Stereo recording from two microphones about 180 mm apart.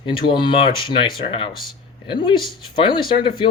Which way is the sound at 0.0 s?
25° left (ahead or behind).